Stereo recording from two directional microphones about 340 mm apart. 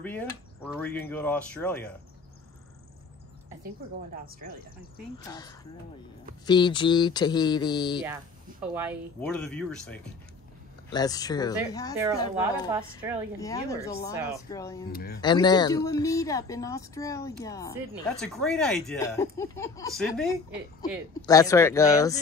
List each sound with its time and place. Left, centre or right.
0.0 s speech: centre
5.2 s speech: centre
8.0 s speech: centre
12.7 s a woman's voice: centre
13.4 s speech: centre
14.9 s speech: left
15.1 s speech: centre
21.3 s speech: centre